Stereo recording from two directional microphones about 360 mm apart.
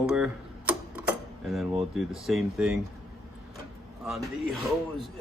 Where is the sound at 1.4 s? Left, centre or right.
Centre.